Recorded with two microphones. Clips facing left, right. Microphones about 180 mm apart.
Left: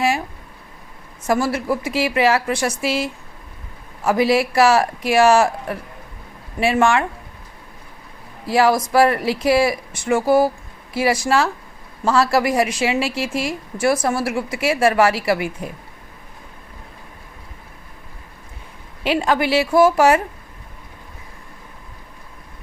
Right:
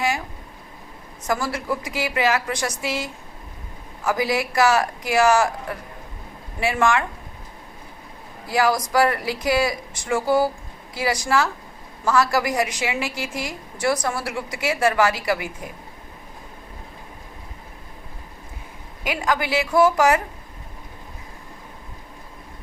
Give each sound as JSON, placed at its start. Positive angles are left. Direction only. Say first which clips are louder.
{"t": 1.3, "sound": "a woman's voice", "louder": "left 5 dB", "side_deg": 25}
{"t": 8.4, "sound": "a woman's voice", "louder": "left 4 dB", "side_deg": 25}
{"t": 19.0, "sound": "a woman's voice", "louder": "left 5 dB", "side_deg": 30}